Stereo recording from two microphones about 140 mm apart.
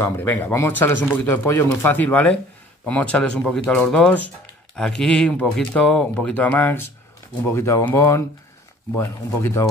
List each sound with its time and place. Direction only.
0.0 s speech: 15° left (ahead or behind)